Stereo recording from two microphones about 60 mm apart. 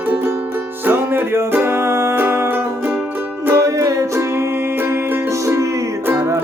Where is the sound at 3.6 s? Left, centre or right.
Right.